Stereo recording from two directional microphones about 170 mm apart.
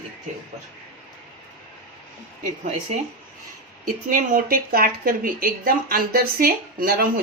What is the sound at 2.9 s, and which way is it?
Speech, 45° right (ahead or behind).